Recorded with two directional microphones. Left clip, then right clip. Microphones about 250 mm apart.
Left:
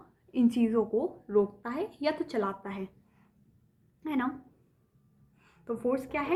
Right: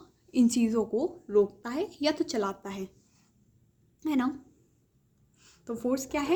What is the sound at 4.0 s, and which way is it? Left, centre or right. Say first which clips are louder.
Speech: right 3 dB; right.